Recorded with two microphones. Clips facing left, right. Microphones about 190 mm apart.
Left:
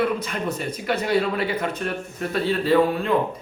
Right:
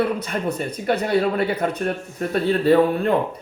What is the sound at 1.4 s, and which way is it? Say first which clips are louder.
Speech: right 3 dB; 35° right (ahead or behind).